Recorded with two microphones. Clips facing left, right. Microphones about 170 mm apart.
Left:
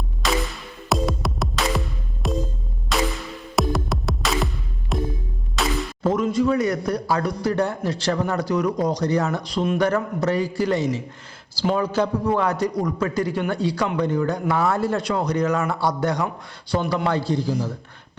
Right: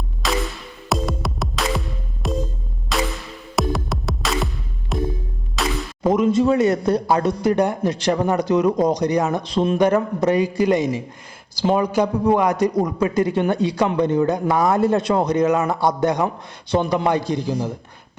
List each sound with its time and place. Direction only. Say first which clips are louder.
0.2 s music: right 1 dB; centre (ahead or behind)
6.0 s a man's voice: right 4 dB; 20° right (ahead or behind)